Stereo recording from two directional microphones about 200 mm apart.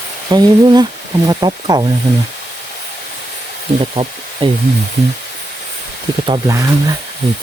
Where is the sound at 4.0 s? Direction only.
35° right (ahead or behind).